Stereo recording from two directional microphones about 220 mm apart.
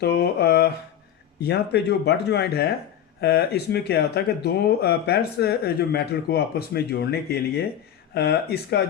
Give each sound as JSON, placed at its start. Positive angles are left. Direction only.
{"t": 0.0, "sound": "speech", "side_deg": 45}